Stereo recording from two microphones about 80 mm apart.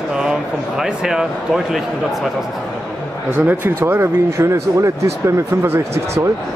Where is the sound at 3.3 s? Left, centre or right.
Right.